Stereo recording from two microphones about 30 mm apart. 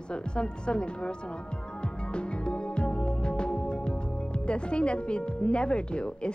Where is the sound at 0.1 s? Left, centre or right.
Left.